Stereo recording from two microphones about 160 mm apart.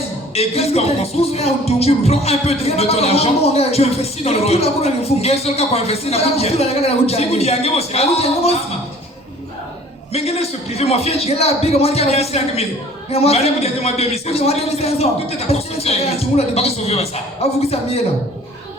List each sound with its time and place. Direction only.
0.3 s speech: 40° left (ahead or behind)
10.1 s speech: 40° left (ahead or behind)